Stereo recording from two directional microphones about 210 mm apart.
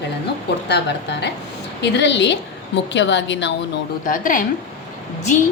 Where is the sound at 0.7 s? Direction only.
55° left (ahead or behind).